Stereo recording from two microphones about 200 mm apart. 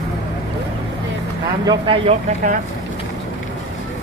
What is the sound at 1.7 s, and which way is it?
Speech, 25° right (ahead or behind).